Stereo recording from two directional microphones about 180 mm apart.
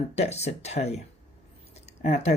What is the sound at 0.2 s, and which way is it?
Speech, 35° left (ahead or behind).